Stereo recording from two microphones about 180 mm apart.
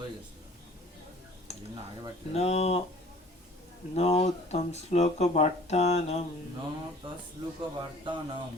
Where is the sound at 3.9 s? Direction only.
35° left (ahead or behind).